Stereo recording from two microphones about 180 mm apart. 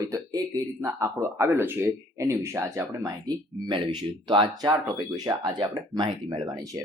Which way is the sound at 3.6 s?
25° right (ahead or behind).